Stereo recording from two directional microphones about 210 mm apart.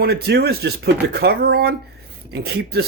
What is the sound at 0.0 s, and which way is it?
Speech, 50° right (ahead or behind).